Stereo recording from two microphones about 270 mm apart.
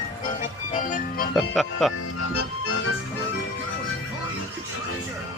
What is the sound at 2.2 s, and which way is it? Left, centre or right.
Music, left.